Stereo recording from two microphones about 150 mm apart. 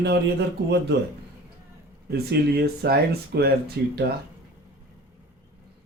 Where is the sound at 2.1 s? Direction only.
90° right.